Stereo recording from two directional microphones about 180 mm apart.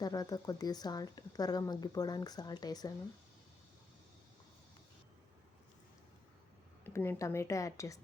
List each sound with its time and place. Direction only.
0.0 s speech: 20° left (ahead or behind)
6.8 s a woman's voice: 10° left (ahead or behind)